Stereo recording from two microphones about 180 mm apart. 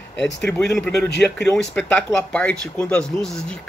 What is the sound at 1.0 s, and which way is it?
Speech, 70° left (ahead or behind).